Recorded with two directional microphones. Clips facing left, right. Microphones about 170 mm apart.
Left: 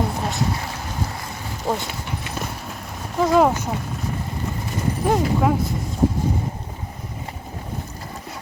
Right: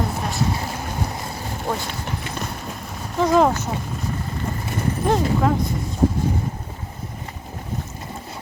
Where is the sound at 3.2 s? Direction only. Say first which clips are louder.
Even; 5° left (ahead or behind).